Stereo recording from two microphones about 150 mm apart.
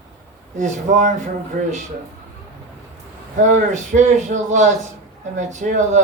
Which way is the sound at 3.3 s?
55° right (ahead or behind).